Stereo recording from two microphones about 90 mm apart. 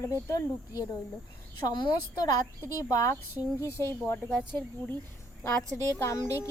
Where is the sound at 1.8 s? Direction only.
45° left (ahead or behind).